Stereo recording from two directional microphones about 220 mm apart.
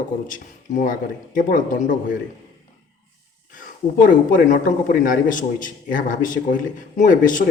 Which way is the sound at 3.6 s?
40° left (ahead or behind).